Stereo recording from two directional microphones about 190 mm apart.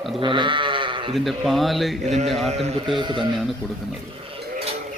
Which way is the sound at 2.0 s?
35° right (ahead or behind).